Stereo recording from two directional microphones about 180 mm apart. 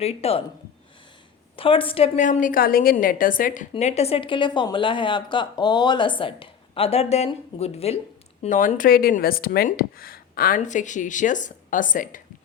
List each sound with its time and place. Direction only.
0.0 s a woman's voice: 35° left (ahead or behind)
1.5 s a woman's voice: 30° left (ahead or behind)
2.2 s a woman's voice: 45° left (ahead or behind)
8.4 s speech: 45° left (ahead or behind)